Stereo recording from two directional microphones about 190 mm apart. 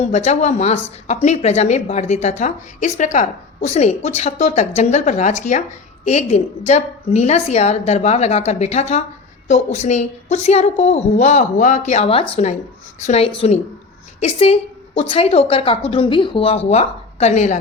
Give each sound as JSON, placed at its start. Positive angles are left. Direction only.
{"t": 0.0, "sound": "a woman's voice", "side_deg": 35}